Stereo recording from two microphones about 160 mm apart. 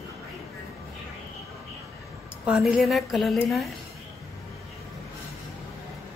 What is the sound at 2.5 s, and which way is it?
Speech, 5° right (ahead or behind).